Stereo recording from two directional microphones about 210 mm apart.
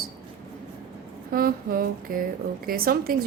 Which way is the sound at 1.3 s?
45° right (ahead or behind).